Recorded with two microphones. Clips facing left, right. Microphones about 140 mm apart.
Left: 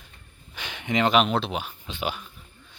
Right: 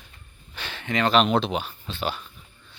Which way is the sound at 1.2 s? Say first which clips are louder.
Right 2 dB; centre (ahead or behind).